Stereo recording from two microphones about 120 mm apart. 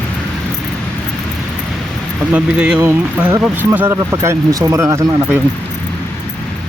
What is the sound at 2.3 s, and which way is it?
Speech, 10° right (ahead or behind).